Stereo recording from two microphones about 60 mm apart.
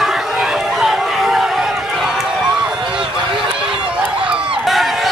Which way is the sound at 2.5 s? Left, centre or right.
Centre.